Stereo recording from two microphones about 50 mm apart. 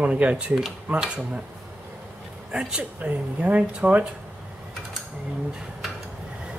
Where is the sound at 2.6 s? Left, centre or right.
Centre.